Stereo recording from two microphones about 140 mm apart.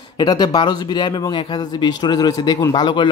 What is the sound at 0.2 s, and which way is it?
Speech, 30° left (ahead or behind).